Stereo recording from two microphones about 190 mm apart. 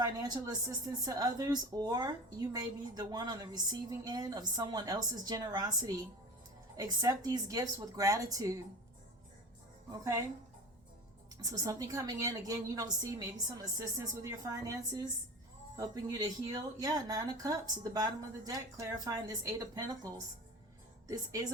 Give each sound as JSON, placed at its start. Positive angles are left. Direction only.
{"t": 0.0, "sound": "a woman's voice", "side_deg": -20}
{"t": 9.9, "sound": "a woman's voice", "side_deg": -15}
{"t": 11.3, "sound": "a woman's voice", "side_deg": -20}